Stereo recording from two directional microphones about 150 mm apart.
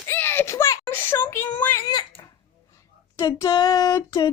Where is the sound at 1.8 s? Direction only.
30° left (ahead or behind).